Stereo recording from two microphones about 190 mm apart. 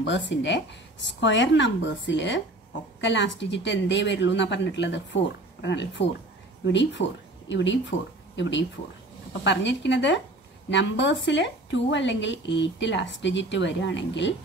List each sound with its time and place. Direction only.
0.0 s a woman's voice: 70° left (ahead or behind)